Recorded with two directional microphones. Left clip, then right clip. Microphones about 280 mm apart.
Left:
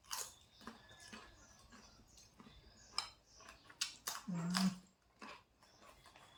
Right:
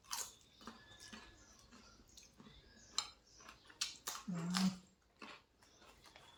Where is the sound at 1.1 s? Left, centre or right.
Centre.